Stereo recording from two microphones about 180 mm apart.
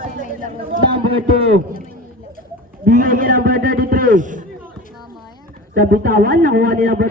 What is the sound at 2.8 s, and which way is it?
A man's voice, 50° right (ahead or behind).